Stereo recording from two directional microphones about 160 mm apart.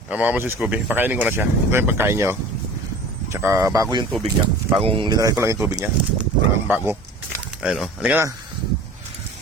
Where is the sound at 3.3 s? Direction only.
15° right (ahead or behind).